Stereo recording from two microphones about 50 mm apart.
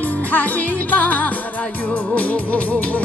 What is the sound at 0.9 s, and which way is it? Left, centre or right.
Music, left.